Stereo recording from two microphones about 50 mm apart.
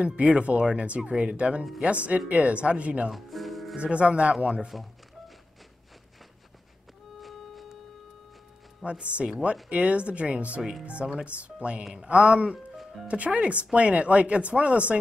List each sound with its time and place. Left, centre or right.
0.0 s speech: right
3.1 s music: centre
3.7 s speech: right
7.2 s a sound: centre
8.8 s speech: right